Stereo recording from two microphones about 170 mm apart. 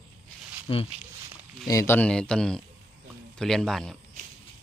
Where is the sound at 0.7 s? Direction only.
30° left (ahead or behind).